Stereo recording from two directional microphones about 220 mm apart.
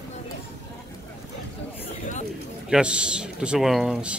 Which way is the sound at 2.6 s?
5° right (ahead or behind).